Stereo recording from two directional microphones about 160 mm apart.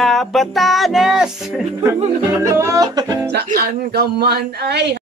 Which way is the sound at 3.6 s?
80° right.